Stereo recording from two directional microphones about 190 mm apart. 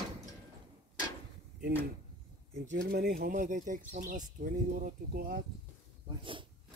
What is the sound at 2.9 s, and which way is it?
Speech, 55° right (ahead or behind).